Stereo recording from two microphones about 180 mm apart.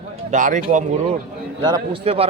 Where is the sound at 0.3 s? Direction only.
45° right (ahead or behind).